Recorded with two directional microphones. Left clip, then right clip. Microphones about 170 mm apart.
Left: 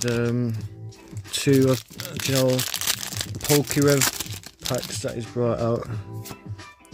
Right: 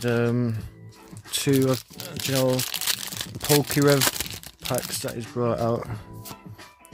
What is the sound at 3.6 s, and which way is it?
Speech, 15° right (ahead or behind).